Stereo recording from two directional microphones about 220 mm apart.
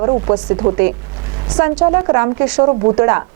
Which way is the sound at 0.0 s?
30° right (ahead or behind).